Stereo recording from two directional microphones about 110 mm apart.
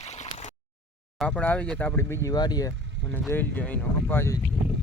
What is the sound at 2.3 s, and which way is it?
Speech, 40° left (ahead or behind).